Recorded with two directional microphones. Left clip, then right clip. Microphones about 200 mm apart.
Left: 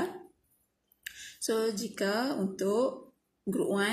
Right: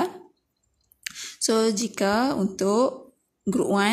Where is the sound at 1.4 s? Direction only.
40° right (ahead or behind).